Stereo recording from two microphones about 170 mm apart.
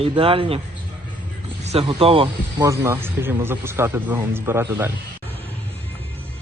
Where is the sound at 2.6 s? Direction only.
15° right (ahead or behind).